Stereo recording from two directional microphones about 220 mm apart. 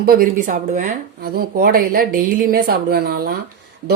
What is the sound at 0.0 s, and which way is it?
Speech, 40° right (ahead or behind).